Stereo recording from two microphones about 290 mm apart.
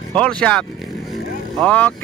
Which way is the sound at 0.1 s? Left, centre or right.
Centre.